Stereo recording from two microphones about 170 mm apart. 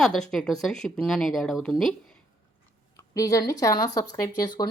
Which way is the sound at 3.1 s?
20° left (ahead or behind).